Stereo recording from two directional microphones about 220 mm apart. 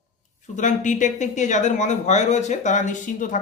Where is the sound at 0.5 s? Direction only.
35° left (ahead or behind).